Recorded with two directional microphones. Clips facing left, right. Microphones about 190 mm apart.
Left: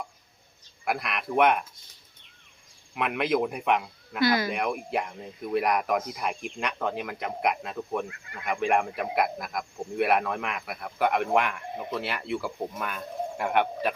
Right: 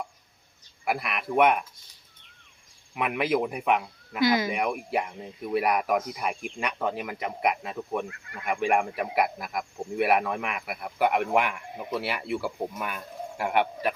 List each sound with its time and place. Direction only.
0.9 s speech: 5° right (ahead or behind)
2.9 s speech: 5° right (ahead or behind)
4.2 s speech: 15° right (ahead or behind)
4.5 s speech: 5° right (ahead or behind)